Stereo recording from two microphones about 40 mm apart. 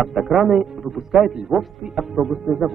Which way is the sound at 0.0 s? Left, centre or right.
Centre.